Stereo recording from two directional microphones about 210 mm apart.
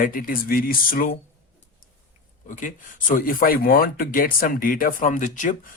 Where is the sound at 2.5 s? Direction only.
40° left (ahead or behind).